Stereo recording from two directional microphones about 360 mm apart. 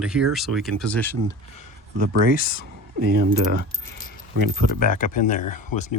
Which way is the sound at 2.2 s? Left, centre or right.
Left.